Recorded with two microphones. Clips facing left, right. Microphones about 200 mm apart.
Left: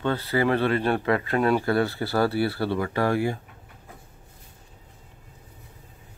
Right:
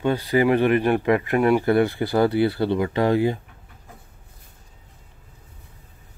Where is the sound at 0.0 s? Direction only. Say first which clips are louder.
Right 4 dB; 15° right (ahead or behind).